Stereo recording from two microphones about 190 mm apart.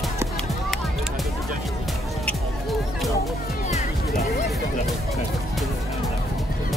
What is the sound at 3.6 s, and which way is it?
Music, 35° left (ahead or behind).